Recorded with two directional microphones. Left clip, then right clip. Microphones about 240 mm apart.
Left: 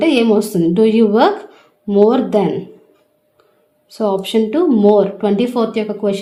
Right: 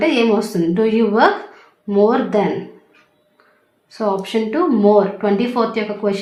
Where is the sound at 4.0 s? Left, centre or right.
Left.